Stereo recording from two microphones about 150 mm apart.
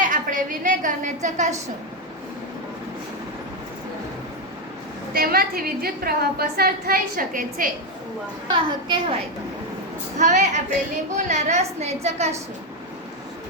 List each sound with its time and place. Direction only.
0.0 s a sound: 60° right (ahead or behind)
5.1 s a woman's voice: 90° right; by 7.7 s 70° right (ahead or behind)
8.4 s a woman's voice: 30° right (ahead or behind)
10.2 s a woman's voice: 50° right (ahead or behind)